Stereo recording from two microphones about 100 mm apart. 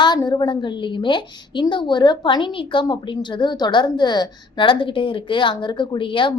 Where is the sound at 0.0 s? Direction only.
45° left (ahead or behind).